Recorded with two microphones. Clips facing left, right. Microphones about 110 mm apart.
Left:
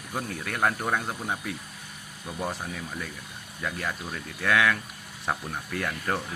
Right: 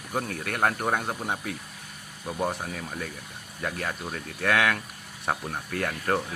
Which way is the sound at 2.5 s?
50° right (ahead or behind).